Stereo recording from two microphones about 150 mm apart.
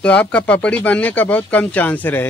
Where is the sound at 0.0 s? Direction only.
10° left (ahead or behind).